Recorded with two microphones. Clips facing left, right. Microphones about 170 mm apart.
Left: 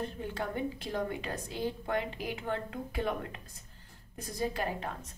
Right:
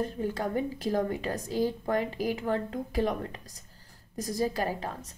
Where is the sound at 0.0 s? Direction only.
40° right (ahead or behind).